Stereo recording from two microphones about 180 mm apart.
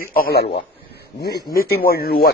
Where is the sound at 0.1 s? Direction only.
60° left (ahead or behind).